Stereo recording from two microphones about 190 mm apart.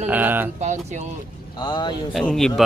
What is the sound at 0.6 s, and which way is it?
Speech, 35° right (ahead or behind).